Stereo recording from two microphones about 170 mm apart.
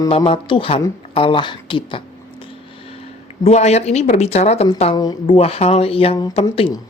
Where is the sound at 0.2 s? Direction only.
30° left (ahead or behind).